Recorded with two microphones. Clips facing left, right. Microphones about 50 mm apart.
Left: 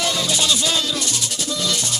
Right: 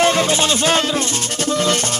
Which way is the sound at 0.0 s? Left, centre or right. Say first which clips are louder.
Right 7 dB; right.